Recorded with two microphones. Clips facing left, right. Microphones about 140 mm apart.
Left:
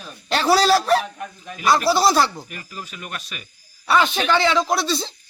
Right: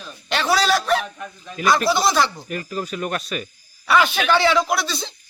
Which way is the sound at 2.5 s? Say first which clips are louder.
Right 9 dB; 45° right (ahead or behind).